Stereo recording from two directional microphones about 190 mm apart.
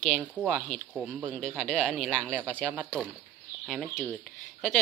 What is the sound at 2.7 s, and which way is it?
Speech, 5° right (ahead or behind).